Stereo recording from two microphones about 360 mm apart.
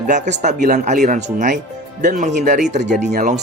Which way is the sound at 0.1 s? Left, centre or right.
Centre.